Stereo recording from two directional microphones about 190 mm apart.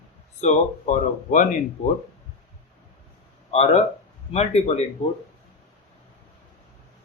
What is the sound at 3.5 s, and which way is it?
Speech, 35° left (ahead or behind).